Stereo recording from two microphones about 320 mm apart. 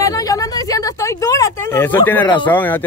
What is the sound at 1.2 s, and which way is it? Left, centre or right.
Speech, centre.